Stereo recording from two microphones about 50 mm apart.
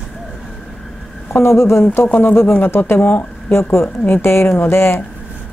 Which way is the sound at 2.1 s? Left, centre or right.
Left.